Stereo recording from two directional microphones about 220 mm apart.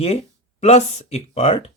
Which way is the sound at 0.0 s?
30° left (ahead or behind).